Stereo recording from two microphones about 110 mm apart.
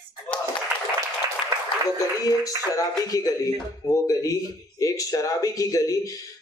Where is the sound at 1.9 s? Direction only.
35° left (ahead or behind).